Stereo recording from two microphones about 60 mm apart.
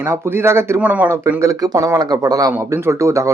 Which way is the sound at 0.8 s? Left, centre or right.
Right.